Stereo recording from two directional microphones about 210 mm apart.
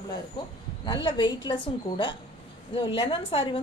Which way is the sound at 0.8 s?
20° left (ahead or behind).